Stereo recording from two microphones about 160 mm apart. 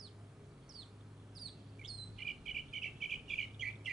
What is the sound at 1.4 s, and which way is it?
Bird, centre (ahead or behind).